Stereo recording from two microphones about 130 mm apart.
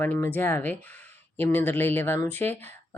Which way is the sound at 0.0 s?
15° left (ahead or behind).